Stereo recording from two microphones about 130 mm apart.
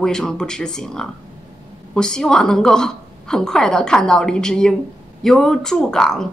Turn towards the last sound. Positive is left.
turn(degrees=5)  # may be behind; listen again after turning